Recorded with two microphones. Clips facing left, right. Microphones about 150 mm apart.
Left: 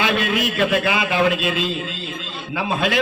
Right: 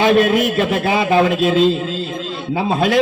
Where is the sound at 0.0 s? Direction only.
40° right (ahead or behind).